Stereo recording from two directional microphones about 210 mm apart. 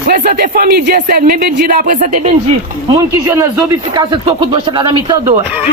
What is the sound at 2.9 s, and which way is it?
Speech, 15° right (ahead or behind).